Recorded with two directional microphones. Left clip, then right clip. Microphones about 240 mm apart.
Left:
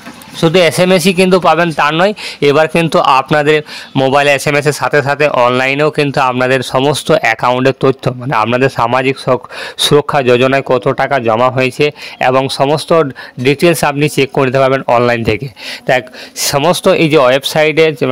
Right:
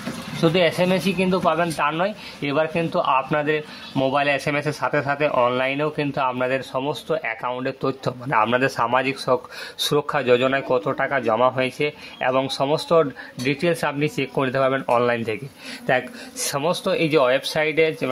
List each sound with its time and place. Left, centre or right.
0.4 s speech: left